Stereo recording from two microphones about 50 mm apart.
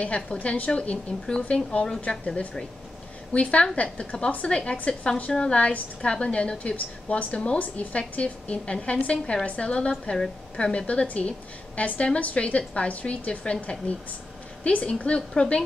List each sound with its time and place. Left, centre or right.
0.0 s a woman's voice: left
10.1 s a woman's voice: centre
10.6 s a woman's voice: left